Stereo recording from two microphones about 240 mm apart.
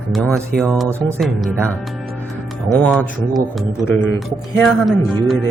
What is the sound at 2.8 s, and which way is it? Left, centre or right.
Speech, centre.